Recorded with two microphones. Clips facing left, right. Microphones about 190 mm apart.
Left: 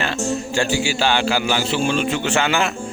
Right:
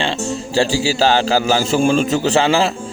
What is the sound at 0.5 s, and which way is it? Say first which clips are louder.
A man's voice: right 7 dB; 35° right (ahead or behind).